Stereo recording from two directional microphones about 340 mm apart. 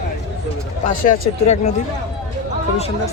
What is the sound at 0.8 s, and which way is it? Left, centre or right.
Speech, left.